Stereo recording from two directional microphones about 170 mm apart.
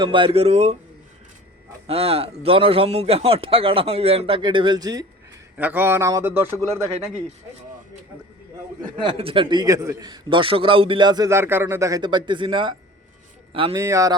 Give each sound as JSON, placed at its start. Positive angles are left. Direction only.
{"t": 0.0, "sound": "a man's voice", "side_deg": -30}
{"t": 1.9, "sound": "a man's voice", "side_deg": -35}
{"t": 5.5, "sound": "speech", "side_deg": -10}
{"t": 9.0, "sound": "a man's voice", "side_deg": -30}
{"t": 13.7, "sound": "a man's voice", "side_deg": -20}